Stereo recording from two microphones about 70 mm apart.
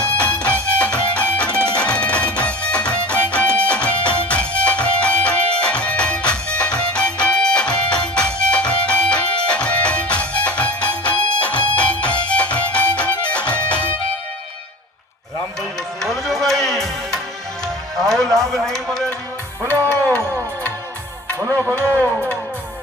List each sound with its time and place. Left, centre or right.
0.2 s music: centre
16.0 s music: centre
17.9 s a sound: centre
19.8 s music: right